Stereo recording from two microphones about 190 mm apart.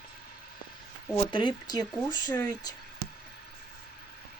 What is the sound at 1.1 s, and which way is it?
Speech, 25° left (ahead or behind).